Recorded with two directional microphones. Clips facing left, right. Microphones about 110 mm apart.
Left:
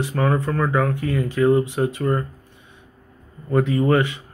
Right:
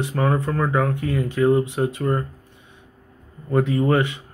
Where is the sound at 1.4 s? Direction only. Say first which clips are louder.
Left 1 dB; 10° right (ahead or behind).